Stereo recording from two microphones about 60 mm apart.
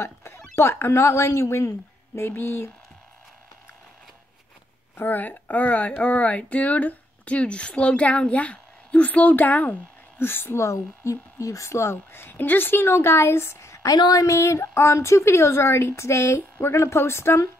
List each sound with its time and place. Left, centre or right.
0.0 s speech: left
4.9 s speech: left
13.8 s speech: left
14.3 s a woman's voice: left